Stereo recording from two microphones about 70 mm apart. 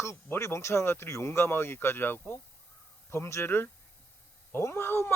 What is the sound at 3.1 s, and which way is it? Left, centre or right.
Speech, left.